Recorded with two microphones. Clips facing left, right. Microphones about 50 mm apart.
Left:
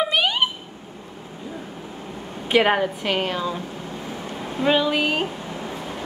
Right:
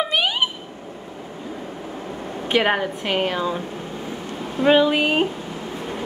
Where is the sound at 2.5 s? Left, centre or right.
Centre.